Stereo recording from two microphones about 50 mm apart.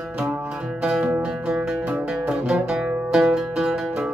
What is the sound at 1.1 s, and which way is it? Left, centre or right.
Music, right.